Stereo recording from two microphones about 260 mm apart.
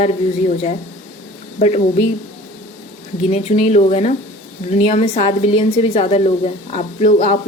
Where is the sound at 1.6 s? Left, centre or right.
Left.